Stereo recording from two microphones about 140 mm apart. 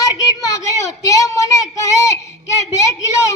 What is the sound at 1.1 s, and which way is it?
Child singing, 25° left (ahead or behind).